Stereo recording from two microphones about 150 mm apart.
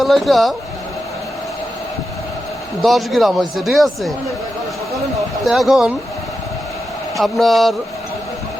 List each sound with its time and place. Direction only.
0.0 s speech: centre (ahead or behind)
2.8 s speech: centre (ahead or behind)
5.4 s speech: centre (ahead or behind)
7.2 s speech: centre (ahead or behind)